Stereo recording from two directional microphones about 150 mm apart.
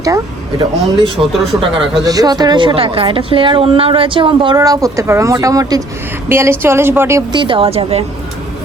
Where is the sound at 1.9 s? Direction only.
25° right (ahead or behind).